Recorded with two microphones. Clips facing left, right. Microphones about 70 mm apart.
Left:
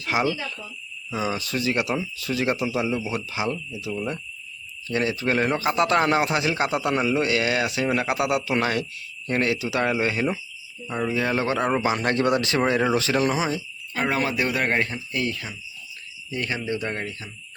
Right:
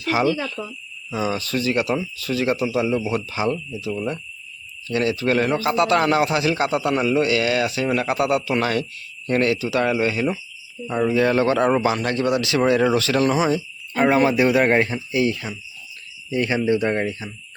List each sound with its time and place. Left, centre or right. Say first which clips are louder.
0.1 s a man's voice: right 4 dB; centre
2.8 s a man's voice: right 4 dB; centre; by 10.4 s left
10.8 s a man's voice: right 6 dB; centre
12.0 s speech: right 1 dB; left; by 13.4 s centre
14.0 s speech: right 7 dB; right; by 15.4 s centre
16.3 s speech: right 8 dB; centre